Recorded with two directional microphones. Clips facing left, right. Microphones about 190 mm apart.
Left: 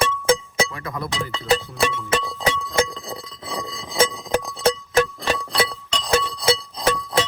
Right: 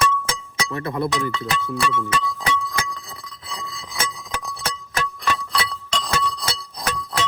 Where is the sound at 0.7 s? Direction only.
30° right (ahead or behind).